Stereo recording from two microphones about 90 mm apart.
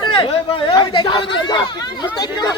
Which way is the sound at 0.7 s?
65° left (ahead or behind).